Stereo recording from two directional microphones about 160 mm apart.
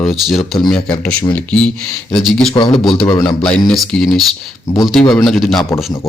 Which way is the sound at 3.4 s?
5° left (ahead or behind).